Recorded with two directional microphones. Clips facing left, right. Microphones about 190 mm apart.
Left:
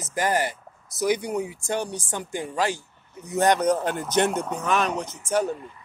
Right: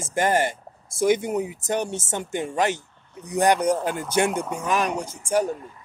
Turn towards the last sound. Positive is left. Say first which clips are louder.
# right 1 dB
turn(degrees=-10)  # may be behind; listen again after turning